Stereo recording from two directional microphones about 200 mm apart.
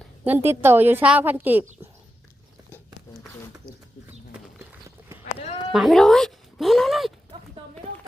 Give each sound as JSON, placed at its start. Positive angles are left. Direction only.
{"t": 0.3, "sound": "a woman's voice", "side_deg": -10}
{"t": 5.2, "sound": "sheep", "side_deg": 35}
{"t": 5.7, "sound": "music", "side_deg": 0}